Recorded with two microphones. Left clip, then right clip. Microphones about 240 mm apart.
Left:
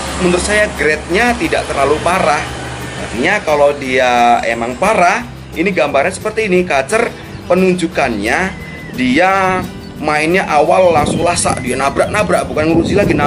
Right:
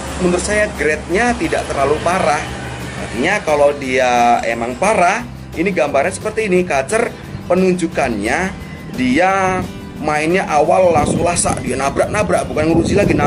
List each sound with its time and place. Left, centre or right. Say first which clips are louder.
0.5 s speech: left 3 dB; centre
11.4 s speech: left 3 dB; centre